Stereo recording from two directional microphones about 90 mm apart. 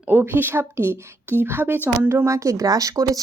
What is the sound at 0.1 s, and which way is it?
A woman's voice, 25° right (ahead or behind).